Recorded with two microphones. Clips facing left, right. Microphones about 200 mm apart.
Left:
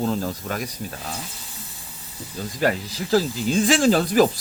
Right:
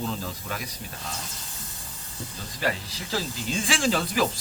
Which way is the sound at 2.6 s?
45° left (ahead or behind).